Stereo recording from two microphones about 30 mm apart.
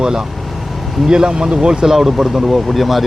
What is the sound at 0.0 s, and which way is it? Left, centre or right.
Speech, right.